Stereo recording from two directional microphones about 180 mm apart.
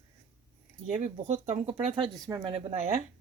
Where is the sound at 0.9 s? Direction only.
40° right (ahead or behind).